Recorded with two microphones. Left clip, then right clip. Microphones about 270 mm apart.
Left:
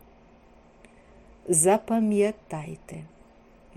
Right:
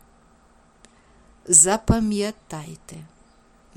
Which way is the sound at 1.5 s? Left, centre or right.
Right.